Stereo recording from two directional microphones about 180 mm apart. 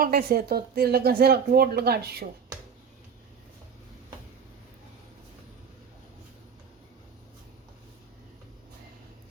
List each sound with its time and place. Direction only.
0.0 s a woman's voice: 60° right (ahead or behind)